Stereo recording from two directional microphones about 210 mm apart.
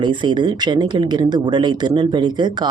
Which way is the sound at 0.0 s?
20° right (ahead or behind).